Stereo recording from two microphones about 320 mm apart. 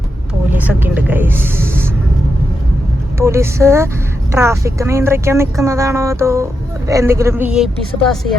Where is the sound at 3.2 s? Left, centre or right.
Centre.